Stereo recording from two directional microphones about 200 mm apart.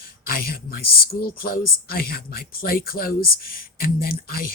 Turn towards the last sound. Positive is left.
turn(degrees=45)  # may be behind; listen again after turning